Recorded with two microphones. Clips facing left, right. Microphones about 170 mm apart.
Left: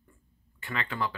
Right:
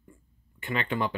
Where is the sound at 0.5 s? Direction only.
20° right (ahead or behind).